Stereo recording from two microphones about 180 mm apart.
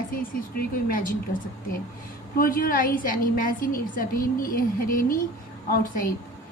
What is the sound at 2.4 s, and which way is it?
A woman's voice, 50° left (ahead or behind).